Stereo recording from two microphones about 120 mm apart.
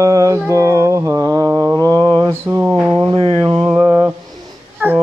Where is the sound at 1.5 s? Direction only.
25° right (ahead or behind).